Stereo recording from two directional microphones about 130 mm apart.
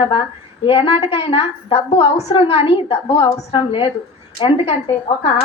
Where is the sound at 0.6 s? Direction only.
50° left (ahead or behind).